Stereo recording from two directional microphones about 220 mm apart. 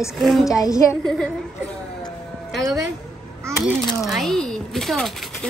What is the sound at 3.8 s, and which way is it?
Speech, centre (ahead or behind).